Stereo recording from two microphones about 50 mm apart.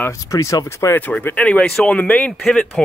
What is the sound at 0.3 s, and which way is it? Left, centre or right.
Speech, left.